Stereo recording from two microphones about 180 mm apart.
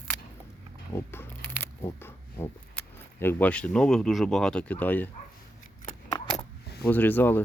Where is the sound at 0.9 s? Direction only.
10° left (ahead or behind).